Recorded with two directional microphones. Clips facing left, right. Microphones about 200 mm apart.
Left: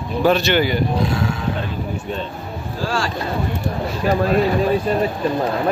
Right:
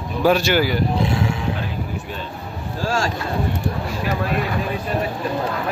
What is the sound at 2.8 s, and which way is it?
Boat, 45° right (ahead or behind).